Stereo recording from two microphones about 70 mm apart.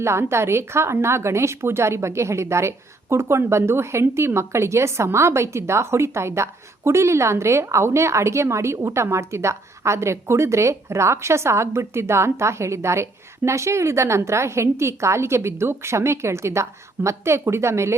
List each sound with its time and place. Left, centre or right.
0.0 s a woman's voice: right